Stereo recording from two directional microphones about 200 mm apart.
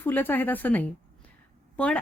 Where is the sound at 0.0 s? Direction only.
10° left (ahead or behind).